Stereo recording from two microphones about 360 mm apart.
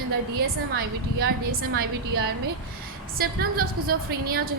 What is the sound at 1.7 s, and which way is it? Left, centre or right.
A woman's voice, right.